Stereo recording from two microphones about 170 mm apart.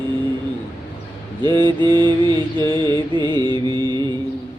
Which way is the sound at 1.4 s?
25° right (ahead or behind).